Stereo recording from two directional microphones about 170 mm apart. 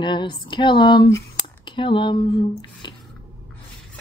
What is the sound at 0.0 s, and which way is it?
Speech, 25° left (ahead or behind).